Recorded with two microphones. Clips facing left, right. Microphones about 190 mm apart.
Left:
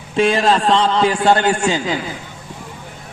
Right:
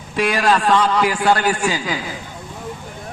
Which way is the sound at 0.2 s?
25° left (ahead or behind).